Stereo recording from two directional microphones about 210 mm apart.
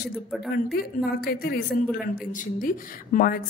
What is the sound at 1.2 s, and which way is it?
A woman's voice, 50° left (ahead or behind).